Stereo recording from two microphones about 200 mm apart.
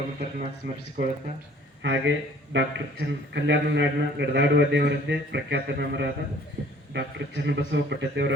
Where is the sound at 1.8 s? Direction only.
65° right (ahead or behind).